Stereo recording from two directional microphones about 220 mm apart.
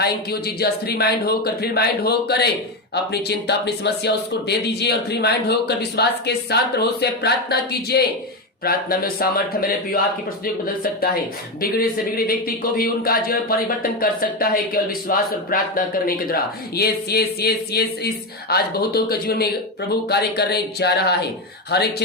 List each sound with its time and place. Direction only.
0.0 s speech: 45° left (ahead or behind)